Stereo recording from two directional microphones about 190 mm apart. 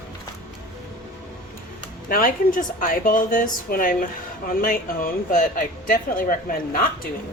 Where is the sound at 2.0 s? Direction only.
50° left (ahead or behind).